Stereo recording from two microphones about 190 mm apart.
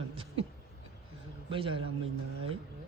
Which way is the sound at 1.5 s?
25° right (ahead or behind).